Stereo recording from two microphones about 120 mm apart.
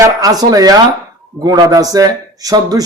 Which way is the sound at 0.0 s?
30° right (ahead or behind).